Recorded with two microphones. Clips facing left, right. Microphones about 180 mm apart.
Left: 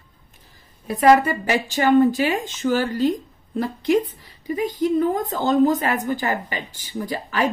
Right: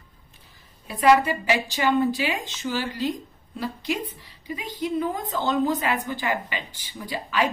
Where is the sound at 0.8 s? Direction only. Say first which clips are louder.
Left 3 dB; 45° left (ahead or behind).